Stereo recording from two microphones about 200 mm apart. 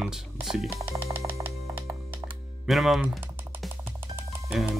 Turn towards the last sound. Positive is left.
turn(degrees=0)  # may be behind; listen again after turning